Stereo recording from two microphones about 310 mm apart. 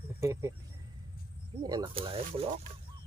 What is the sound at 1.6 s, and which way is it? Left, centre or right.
Speech, centre.